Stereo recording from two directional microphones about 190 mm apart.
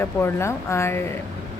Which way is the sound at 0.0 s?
15° left (ahead or behind).